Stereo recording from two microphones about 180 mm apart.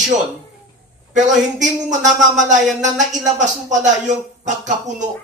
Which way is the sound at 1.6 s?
45° right (ahead or behind).